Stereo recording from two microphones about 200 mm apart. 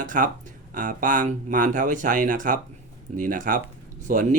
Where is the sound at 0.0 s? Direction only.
40° right (ahead or behind).